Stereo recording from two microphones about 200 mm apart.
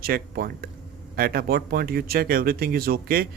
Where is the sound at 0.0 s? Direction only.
50° right (ahead or behind).